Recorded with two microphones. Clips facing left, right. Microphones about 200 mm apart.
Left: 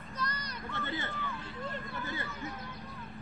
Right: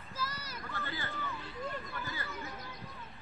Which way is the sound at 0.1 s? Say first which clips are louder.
Left 2 dB; 5° right (ahead or behind).